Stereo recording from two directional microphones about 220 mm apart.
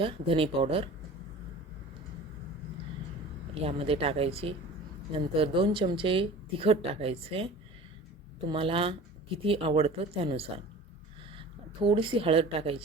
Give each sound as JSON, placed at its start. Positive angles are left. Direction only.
{"t": 0.0, "sound": "speech", "side_deg": -25}
{"t": 3.5, "sound": "speech", "side_deg": -25}